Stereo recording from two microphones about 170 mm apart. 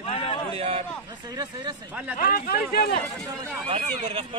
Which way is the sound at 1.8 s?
10° right (ahead or behind).